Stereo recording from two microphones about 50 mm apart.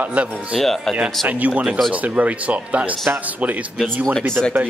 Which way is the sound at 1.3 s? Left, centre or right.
Right.